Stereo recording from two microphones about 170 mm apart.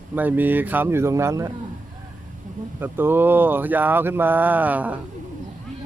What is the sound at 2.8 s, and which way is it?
Speech, 10° right (ahead or behind).